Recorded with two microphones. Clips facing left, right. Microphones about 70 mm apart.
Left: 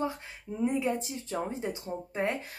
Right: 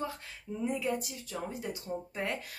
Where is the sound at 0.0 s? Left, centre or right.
Left.